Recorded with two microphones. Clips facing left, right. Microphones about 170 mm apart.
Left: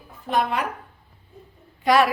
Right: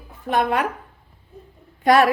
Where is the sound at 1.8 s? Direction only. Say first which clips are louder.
Right 3 dB; 50° right (ahead or behind).